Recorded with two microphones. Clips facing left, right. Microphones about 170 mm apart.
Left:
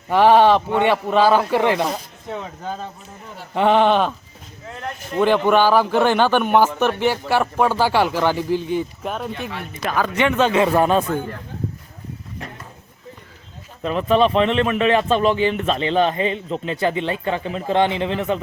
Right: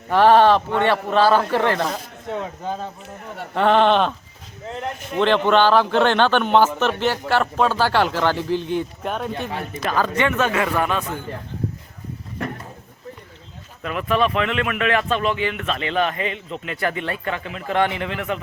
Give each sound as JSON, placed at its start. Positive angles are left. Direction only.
{"t": 0.1, "sound": "speech", "side_deg": 10}
{"t": 3.5, "sound": "speech", "side_deg": 15}
{"t": 5.1, "sound": "speech", "side_deg": 10}
{"t": 9.9, "sound": "speech", "side_deg": 15}
{"t": 13.8, "sound": "speech", "side_deg": 25}